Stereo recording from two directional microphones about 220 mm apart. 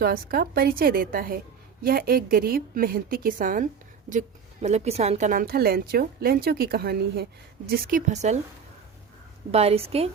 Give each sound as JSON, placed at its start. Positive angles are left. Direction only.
{"t": 0.0, "sound": "a woman's voice", "side_deg": -45}
{"t": 9.5, "sound": "a woman's voice", "side_deg": -30}